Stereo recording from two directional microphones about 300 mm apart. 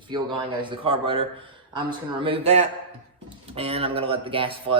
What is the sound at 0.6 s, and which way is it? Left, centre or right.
Speech, centre.